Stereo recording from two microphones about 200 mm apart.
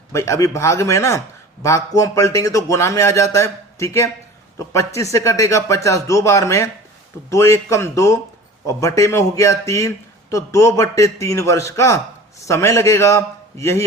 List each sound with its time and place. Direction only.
0.1 s a man's voice: 15° left (ahead or behind)